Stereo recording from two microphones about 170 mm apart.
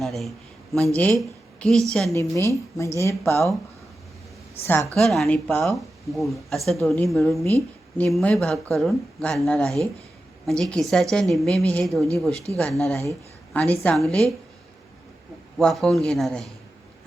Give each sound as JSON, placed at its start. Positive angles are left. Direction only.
{"t": 0.0, "sound": "a sound", "side_deg": 0}
{"t": 1.9, "sound": "speech", "side_deg": 5}
{"t": 2.1, "sound": "speech", "side_deg": 15}
{"t": 4.6, "sound": "speech", "side_deg": 15}
{"t": 4.9, "sound": "speech", "side_deg": 5}
{"t": 7.4, "sound": "a woman's voice", "side_deg": 15}
{"t": 15.5, "sound": "speech", "side_deg": 0}